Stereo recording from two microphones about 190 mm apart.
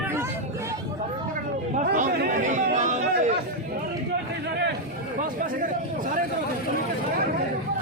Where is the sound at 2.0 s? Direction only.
45° right (ahead or behind).